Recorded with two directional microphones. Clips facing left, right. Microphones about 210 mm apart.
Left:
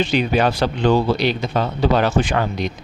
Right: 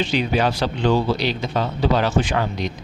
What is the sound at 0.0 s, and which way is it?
Speech, 55° left (ahead or behind).